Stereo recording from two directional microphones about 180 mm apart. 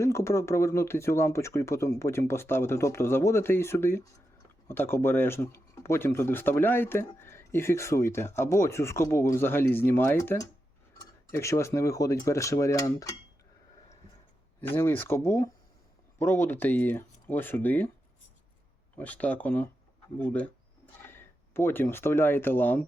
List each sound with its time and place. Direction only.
0.0 s speech: 15° left (ahead or behind)
14.7 s speech: 10° left (ahead or behind)
18.9 s speech: 10° left (ahead or behind)